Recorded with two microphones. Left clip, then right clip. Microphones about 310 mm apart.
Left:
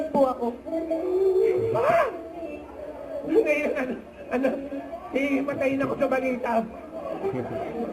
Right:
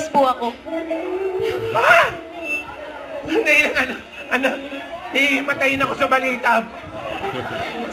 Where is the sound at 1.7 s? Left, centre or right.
Centre.